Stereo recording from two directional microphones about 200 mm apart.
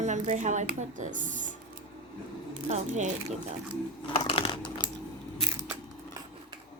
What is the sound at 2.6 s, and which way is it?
Speech, 35° right (ahead or behind).